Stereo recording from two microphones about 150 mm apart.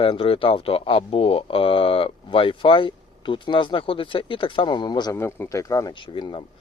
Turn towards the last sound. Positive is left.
turn(degrees=35)  # may be behind; listen again after turning